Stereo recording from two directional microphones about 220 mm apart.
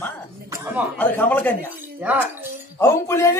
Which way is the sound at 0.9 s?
10° left (ahead or behind).